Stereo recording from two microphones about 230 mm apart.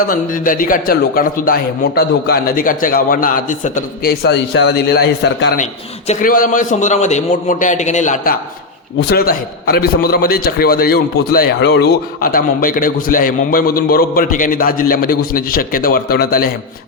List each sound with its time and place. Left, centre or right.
0.1 s a man's voice: left